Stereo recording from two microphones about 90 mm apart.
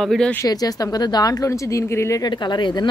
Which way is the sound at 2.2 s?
55° left (ahead or behind).